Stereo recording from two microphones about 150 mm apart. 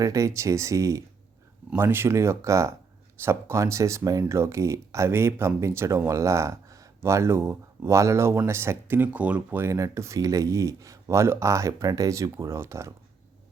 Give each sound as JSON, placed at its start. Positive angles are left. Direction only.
{"t": 0.0, "sound": "speech", "side_deg": -20}